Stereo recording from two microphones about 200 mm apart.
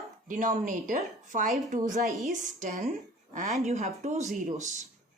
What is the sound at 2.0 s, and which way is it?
Speech, centre (ahead or behind).